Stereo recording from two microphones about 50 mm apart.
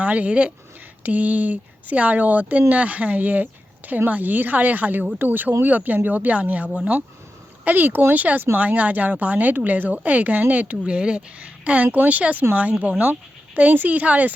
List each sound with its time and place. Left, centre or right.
0.0 s speech: right
1.0 s speech: right
11.9 s speech: right
13.7 s speech: right